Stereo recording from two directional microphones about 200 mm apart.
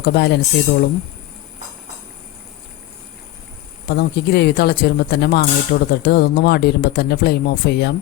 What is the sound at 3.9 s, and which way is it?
Speech, 55° left (ahead or behind).